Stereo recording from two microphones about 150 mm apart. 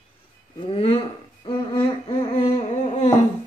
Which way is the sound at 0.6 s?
40° left (ahead or behind).